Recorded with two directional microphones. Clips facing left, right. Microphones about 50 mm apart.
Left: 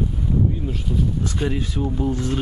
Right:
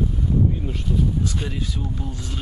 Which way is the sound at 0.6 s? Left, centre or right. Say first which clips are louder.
Left 1 dB; centre.